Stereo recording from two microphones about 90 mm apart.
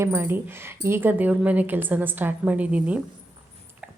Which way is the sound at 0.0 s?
30° right (ahead or behind).